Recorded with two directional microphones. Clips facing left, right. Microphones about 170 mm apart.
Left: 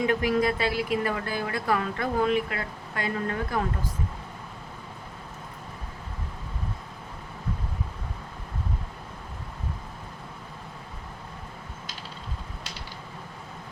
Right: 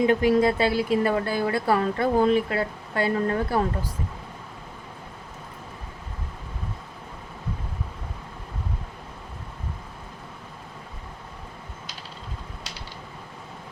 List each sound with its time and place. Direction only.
0.0 s speech: 30° right (ahead or behind)